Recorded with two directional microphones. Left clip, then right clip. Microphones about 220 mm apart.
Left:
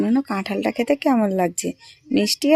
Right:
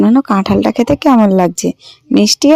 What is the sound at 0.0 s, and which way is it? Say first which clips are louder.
Speech: right 11 dB; 30° right (ahead or behind).